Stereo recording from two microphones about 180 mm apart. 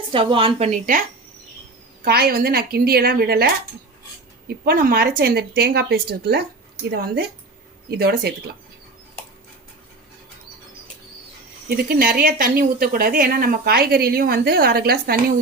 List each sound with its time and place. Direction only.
0.1 s a woman's voice: 30° right (ahead or behind)
0.7 s speech: 50° right (ahead or behind)
2.0 s a woman's voice: 60° right (ahead or behind)
11.9 s a woman's voice: 55° right (ahead or behind)